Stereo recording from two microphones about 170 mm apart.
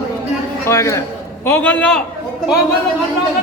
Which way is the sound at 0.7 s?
15° left (ahead or behind).